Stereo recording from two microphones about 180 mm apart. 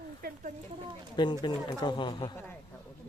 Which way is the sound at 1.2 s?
25° left (ahead or behind).